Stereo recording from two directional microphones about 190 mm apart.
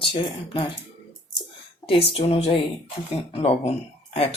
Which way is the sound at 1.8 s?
30° left (ahead or behind).